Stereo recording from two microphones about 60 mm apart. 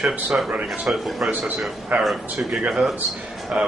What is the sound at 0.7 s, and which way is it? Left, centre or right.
Speech, centre.